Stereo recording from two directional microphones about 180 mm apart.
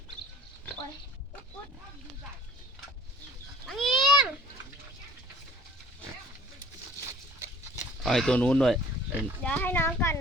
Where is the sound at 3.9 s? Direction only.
25° left (ahead or behind).